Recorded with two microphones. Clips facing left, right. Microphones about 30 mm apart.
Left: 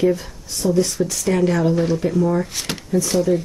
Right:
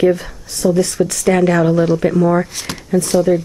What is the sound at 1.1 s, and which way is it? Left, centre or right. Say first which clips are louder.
Speech: right 5 dB; right.